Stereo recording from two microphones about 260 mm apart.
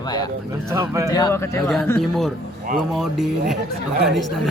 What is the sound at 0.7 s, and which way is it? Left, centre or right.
Speech, centre.